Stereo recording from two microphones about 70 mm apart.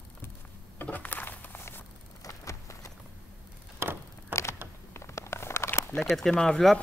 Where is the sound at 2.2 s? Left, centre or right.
Left.